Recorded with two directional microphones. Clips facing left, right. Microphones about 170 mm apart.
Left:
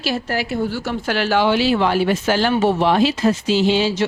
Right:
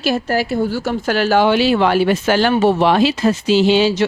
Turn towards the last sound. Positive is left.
turn(degrees=-70)  # may be behind; listen again after turning